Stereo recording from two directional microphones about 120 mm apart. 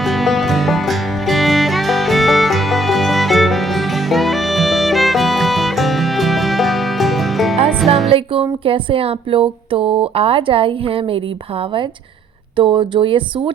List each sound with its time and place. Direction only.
0.0 s music: centre (ahead or behind)
8.1 s music: 50° right (ahead or behind)
8.6 s speech: 50° right (ahead or behind)
12.5 s speech: 45° right (ahead or behind)